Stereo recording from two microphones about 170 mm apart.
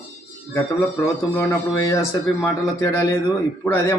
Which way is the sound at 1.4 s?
15° left (ahead or behind).